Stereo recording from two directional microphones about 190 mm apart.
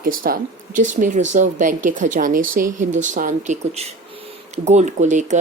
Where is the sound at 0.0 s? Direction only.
50° right (ahead or behind).